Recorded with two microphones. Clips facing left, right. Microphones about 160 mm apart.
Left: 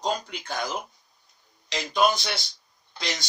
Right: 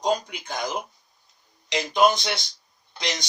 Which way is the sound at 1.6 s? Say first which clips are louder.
Right 3 dB; 20° right (ahead or behind).